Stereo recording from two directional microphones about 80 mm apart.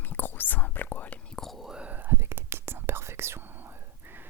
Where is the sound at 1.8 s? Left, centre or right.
Right.